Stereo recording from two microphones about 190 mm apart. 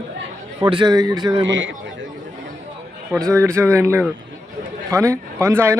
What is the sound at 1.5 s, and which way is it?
Speech, 70° right (ahead or behind).